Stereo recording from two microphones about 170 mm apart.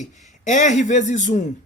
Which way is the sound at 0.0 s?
45° left (ahead or behind).